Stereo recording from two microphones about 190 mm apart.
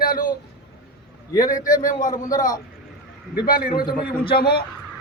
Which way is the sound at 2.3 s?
20° left (ahead or behind).